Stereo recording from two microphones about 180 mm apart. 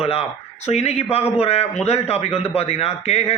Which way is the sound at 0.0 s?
35° left (ahead or behind).